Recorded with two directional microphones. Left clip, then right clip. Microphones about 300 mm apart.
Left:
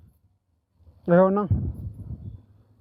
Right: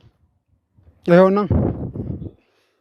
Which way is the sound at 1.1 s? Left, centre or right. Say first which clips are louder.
Right 6 dB; right.